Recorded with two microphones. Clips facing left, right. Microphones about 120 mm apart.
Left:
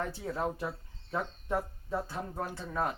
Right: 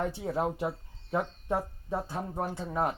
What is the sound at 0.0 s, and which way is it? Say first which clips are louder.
Speech: right 4 dB; 20° right (ahead or behind).